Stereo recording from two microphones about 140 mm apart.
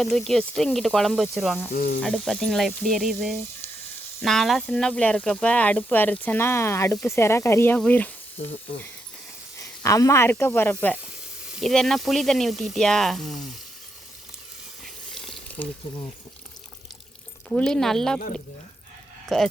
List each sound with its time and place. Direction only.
0.0 s speech: centre (ahead or behind)
9.6 s speech: 25° left (ahead or behind); by 13.4 s centre (ahead or behind)
15.1 s water: 5° left (ahead or behind)
17.5 s speech: 5° left (ahead or behind)
19.3 s speech: centre (ahead or behind)